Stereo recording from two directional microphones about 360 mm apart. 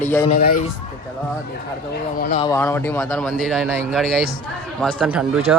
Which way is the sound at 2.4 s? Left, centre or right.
Centre.